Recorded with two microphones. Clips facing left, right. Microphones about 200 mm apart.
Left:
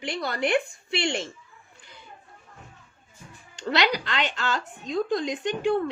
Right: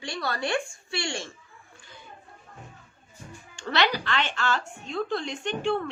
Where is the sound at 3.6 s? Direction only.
15° left (ahead or behind).